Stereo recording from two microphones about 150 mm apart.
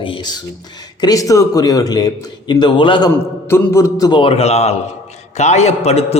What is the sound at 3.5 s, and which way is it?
A man's voice, 20° left (ahead or behind).